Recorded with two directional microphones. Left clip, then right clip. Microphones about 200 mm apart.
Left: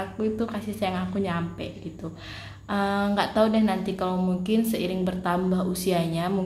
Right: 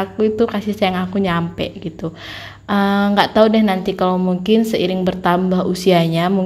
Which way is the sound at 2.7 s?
35° right (ahead or behind).